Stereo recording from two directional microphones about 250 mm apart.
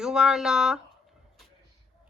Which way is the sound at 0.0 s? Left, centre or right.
Centre.